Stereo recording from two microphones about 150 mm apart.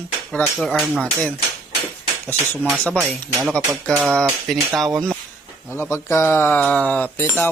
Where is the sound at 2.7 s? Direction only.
10° left (ahead or behind).